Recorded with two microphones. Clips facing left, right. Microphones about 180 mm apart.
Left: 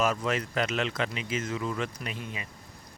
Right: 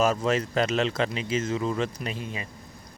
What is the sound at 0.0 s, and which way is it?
Speech, 30° right (ahead or behind).